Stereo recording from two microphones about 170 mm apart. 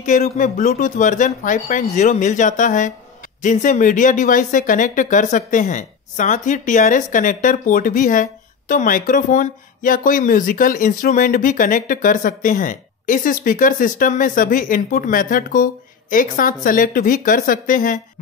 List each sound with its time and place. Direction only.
0.0 s speech: 50° left (ahead or behind)